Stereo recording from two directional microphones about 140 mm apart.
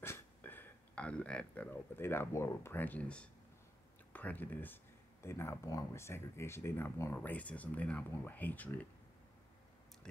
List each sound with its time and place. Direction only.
0.0 s speech: 15° left (ahead or behind)